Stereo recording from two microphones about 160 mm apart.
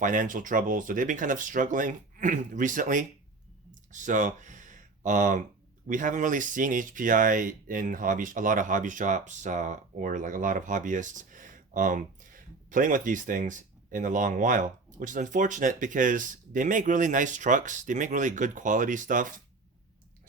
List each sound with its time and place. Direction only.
0.0 s speech: 55° right (ahead or behind)